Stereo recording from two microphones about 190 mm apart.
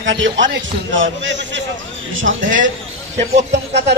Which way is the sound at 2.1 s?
90° right.